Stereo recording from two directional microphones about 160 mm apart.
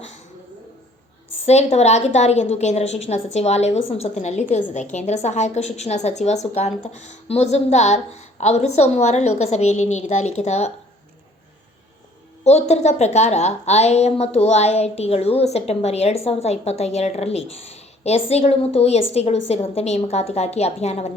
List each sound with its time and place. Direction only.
1.5 s a woman's voice: 45° left (ahead or behind)
12.5 s a woman's voice: 45° left (ahead or behind)